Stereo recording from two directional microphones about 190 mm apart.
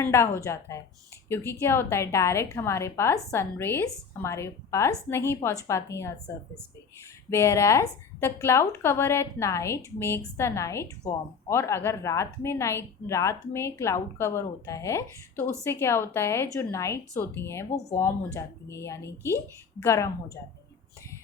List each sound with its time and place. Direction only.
0.0 s a woman's voice: 15° left (ahead or behind)